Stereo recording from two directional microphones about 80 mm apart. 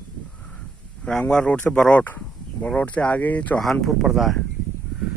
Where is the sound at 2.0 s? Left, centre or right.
Left.